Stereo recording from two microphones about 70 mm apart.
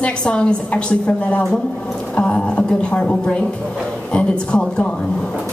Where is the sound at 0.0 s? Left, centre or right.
Centre.